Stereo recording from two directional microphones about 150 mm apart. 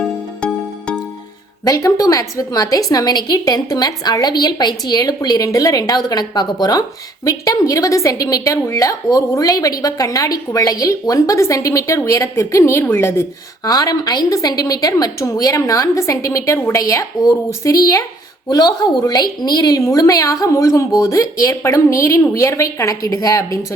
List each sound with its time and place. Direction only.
0.4 s music: 5° left (ahead or behind)
1.6 s a woman's voice: 20° left (ahead or behind)